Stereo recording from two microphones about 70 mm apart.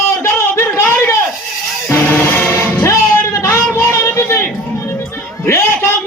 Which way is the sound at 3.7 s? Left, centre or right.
Left.